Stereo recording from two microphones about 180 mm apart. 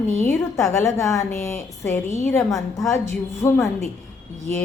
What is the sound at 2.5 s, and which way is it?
Speech, centre (ahead or behind).